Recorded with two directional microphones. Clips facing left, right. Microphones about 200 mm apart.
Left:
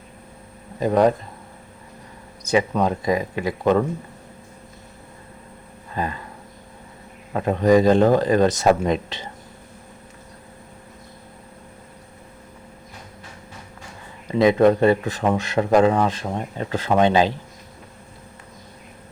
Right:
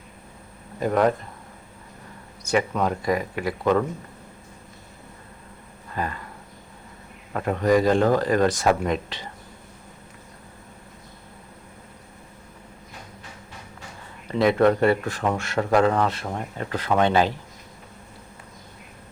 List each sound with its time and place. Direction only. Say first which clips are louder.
0.8 s speech: left 3 dB; 20° left (ahead or behind)
2.4 s speech: left 3 dB; 20° left (ahead or behind)
7.3 s speech: left 4 dB; 20° left (ahead or behind)
14.3 s speech: left 3 dB; 20° left (ahead or behind)